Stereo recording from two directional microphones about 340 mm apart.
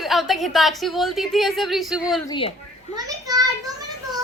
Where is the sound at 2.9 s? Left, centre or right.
Centre.